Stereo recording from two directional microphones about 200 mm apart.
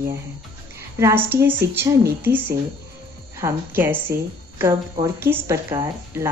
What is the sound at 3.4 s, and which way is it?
Speech, 10° right (ahead or behind).